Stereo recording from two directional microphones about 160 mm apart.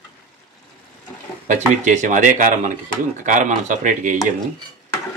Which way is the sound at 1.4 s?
50° right (ahead or behind).